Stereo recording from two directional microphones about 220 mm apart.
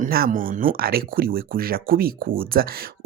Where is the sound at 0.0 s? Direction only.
40° right (ahead or behind).